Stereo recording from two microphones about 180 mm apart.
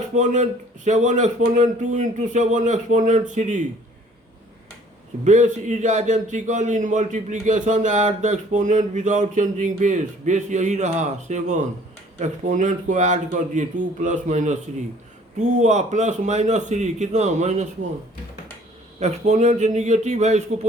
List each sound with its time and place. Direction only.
0.2 s a man's voice: 40° right (ahead or behind)
5.2 s a man's voice: 40° right (ahead or behind)
18.9 s a man's voice: 40° right (ahead or behind)